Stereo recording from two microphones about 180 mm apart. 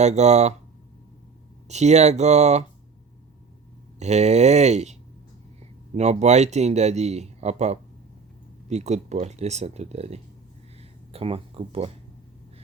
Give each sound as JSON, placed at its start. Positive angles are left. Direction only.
{"t": 0.0, "sound": "speech", "side_deg": -40}
{"t": 1.6, "sound": "speech", "side_deg": -40}
{"t": 4.0, "sound": "speech", "side_deg": -40}